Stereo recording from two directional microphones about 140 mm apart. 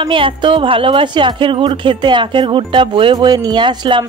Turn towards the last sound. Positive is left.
turn(degrees=-35)  # may be behind; listen again after turning